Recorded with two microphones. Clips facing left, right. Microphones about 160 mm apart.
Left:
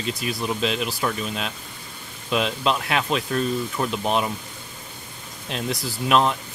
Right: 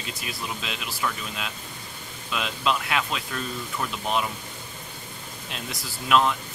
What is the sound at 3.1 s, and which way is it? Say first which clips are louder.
Speech: left 9 dB; 40° left (ahead or behind).